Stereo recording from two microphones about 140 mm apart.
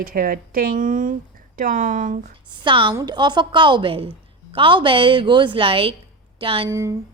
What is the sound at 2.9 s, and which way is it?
Speech, 25° right (ahead or behind).